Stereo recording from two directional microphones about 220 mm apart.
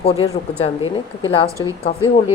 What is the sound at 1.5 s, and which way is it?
Speech, 15° right (ahead or behind).